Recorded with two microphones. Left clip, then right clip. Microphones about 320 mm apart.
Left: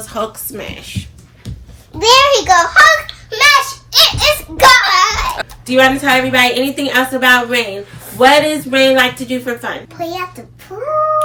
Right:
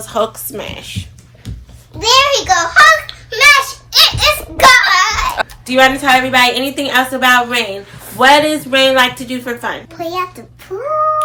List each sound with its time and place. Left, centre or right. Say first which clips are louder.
0.0 s speech: right 4 dB; centre
2.0 s a child's voice: left 2 dB; left
3.2 s child singing: right 1 dB; centre
5.4 s speech: even; centre